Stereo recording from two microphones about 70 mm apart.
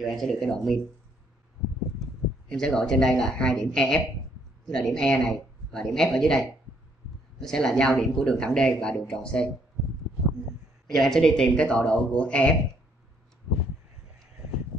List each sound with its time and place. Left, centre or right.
0.0 s speech: centre
1.6 s a sound: centre
2.5 s speech: centre
10.9 s speech: centre